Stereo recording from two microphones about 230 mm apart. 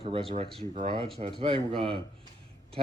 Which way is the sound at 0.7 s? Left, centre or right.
Right.